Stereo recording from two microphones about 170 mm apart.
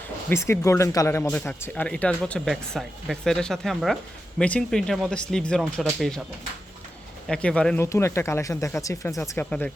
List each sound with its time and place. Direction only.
0.3 s speech: 15° left (ahead or behind)
7.3 s speech: 5° left (ahead or behind)
9.5 s speech: 5° left (ahead or behind)